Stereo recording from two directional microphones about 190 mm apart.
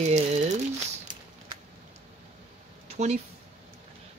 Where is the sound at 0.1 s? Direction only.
40° right (ahead or behind).